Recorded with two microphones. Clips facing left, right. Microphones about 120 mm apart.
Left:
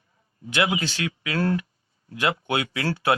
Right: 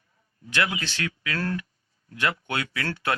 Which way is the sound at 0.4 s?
20° left (ahead or behind).